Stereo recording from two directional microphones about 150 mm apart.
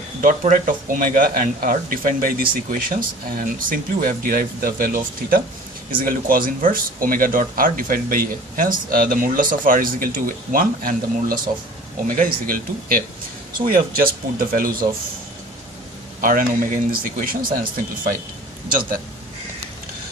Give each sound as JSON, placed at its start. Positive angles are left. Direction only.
{"t": 0.2, "sound": "speech", "side_deg": -60}
{"t": 16.2, "sound": "speech", "side_deg": -65}